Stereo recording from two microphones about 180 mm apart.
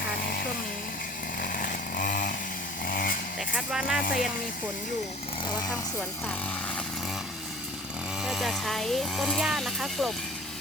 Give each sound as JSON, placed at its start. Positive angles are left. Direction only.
{"t": 1.4, "sound": "chainsaw", "side_deg": 55}
{"t": 3.5, "sound": "speech", "side_deg": -5}
{"t": 4.0, "sound": "speech", "side_deg": 50}
{"t": 8.2, "sound": "speech", "side_deg": 0}